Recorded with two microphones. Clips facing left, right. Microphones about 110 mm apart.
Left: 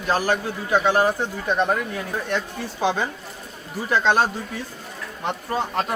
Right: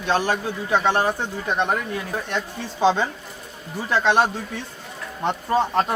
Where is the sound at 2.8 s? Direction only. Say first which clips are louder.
Right 4 dB; 25° right (ahead or behind).